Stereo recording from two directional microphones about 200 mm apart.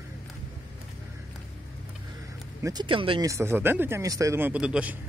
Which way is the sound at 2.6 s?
20° right (ahead or behind).